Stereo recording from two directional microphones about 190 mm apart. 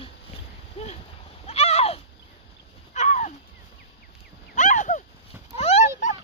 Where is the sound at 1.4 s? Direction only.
35° left (ahead or behind).